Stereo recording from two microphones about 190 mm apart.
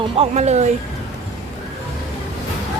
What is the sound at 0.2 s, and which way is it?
Speech, 35° right (ahead or behind).